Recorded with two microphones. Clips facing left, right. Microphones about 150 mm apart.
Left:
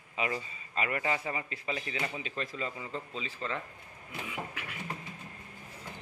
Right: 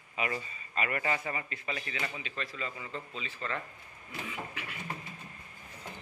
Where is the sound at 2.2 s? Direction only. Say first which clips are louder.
Left 2 dB; 40° left (ahead or behind).